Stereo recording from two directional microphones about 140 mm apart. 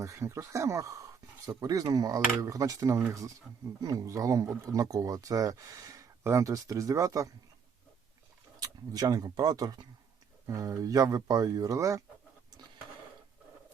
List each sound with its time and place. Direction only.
0.0 s speech: 20° right (ahead or behind)
8.5 s speech: 30° right (ahead or behind)